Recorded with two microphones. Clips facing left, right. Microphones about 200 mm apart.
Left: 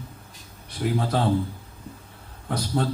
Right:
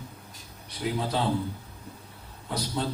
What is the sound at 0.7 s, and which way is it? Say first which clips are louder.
Speech: left 4 dB; 50° left (ahead or behind).